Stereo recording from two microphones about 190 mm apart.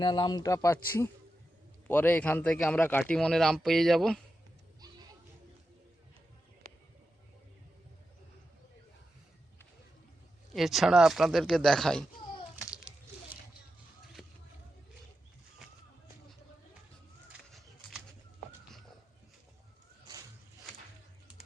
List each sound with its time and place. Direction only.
0.0 s speech: 20° left (ahead or behind); by 4.2 s centre (ahead or behind)
10.5 s speech: centre (ahead or behind)